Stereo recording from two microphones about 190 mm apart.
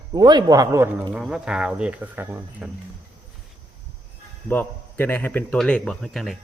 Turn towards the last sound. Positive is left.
turn(degrees=0)  # may be behind; listen again after turning